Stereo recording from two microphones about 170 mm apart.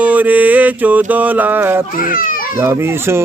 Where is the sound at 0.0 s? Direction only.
10° right (ahead or behind).